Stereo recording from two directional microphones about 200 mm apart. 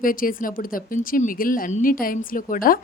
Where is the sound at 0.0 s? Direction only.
45° left (ahead or behind).